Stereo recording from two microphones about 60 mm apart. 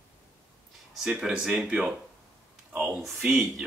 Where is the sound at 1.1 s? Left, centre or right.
Centre.